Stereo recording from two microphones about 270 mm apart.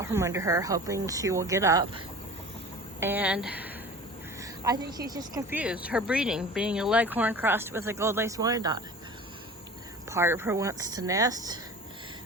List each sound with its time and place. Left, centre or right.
0.0 s a woman's voice: centre
3.0 s a woman's voice: centre
10.1 s a woman's voice: centre